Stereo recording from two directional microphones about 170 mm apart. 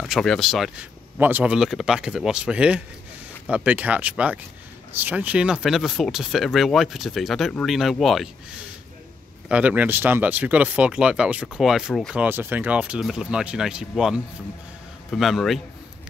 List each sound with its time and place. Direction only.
0.0 s speech: centre (ahead or behind)
12.3 s speech: 10° right (ahead or behind)